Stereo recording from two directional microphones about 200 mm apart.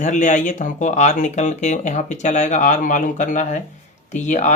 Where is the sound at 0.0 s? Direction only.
40° left (ahead or behind).